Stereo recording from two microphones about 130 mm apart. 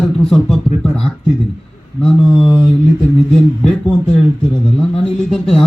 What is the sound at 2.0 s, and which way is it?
Speech, 5° left (ahead or behind).